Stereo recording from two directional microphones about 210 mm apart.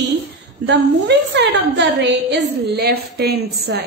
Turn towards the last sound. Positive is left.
turn(degrees=-50)  # may be behind; listen again after turning